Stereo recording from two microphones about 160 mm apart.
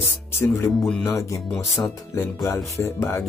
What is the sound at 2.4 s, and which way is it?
Speech, 20° left (ahead or behind).